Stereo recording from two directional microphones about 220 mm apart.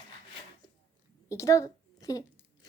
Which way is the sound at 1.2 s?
15° left (ahead or behind).